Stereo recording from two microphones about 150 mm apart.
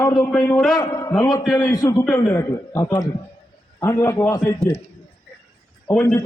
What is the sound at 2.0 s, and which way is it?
Speech, centre (ahead or behind).